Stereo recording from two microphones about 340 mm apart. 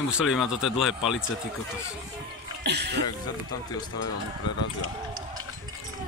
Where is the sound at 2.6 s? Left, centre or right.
Right.